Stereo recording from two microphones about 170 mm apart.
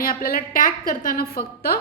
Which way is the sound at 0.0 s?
60° left (ahead or behind).